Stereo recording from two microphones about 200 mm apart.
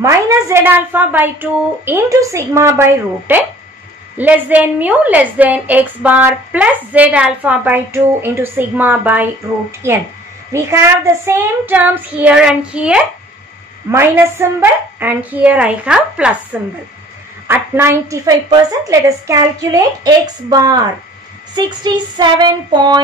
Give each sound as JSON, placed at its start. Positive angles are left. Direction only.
{"t": 0.0, "sound": "a woman's voice", "side_deg": -10}
{"t": 17.5, "sound": "a woman's voice", "side_deg": -10}
{"t": 21.5, "sound": "child singing", "side_deg": -20}